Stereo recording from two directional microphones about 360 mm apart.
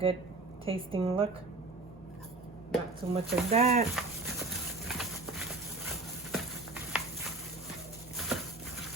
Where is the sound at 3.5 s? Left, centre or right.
Centre.